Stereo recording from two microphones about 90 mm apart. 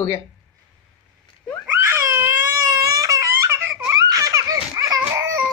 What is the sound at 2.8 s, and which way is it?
Baby laughter, 40° right (ahead or behind).